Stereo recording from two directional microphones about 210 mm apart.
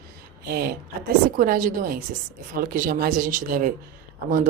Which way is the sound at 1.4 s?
40° right (ahead or behind).